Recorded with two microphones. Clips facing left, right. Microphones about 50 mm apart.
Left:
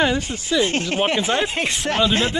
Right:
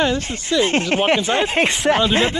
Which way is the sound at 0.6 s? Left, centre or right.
Right.